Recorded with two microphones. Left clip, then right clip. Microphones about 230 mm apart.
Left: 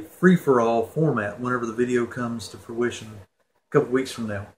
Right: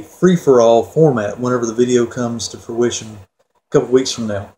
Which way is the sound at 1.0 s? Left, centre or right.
Centre.